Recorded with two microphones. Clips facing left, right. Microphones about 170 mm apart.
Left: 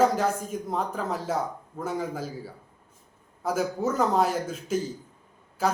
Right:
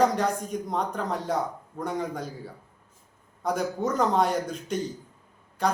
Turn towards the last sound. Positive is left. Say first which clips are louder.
# even
turn(degrees=5)  # may be behind; listen again after turning